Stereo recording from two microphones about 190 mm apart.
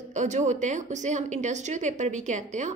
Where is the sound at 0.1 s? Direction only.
40° right (ahead or behind).